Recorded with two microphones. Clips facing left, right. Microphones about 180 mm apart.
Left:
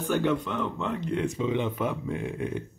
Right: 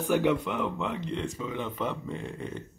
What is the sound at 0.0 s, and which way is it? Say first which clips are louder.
Speech: right 1 dB; 5° right (ahead or behind).